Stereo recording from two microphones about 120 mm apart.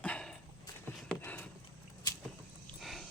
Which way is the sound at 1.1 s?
15° left (ahead or behind).